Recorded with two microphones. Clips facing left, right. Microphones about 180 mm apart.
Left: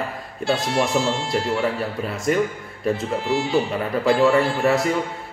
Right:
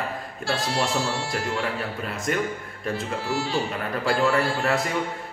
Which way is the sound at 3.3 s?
20° left (ahead or behind).